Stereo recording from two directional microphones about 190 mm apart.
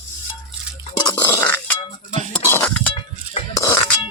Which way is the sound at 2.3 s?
10° left (ahead or behind).